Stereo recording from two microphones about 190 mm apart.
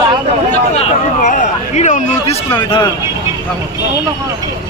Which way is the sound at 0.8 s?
40° left (ahead or behind).